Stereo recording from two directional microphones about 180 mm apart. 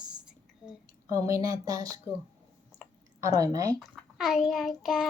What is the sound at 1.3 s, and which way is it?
Speech, 20° right (ahead or behind).